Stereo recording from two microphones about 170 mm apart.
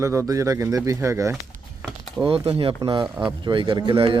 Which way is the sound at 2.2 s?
35° right (ahead or behind).